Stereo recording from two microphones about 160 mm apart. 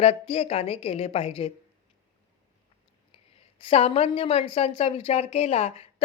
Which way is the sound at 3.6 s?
40° left (ahead or behind).